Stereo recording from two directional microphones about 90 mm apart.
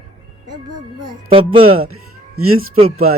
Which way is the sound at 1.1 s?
70° right (ahead or behind).